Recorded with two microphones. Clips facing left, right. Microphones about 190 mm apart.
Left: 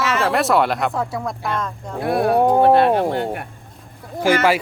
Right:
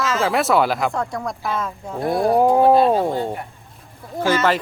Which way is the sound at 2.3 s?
Centre (ahead or behind).